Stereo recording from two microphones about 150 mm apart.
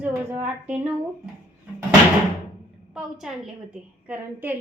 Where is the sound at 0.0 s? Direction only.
15° right (ahead or behind).